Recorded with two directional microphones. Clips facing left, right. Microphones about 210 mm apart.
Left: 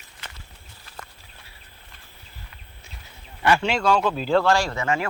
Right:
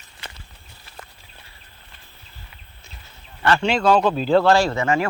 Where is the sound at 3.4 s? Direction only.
10° left (ahead or behind).